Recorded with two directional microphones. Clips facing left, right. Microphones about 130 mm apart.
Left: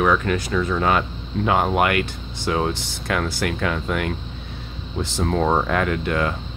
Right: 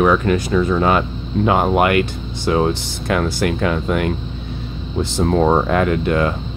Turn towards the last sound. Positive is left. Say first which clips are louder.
# right 5 dB
turn(degrees=-30)  # may be behind; listen again after turning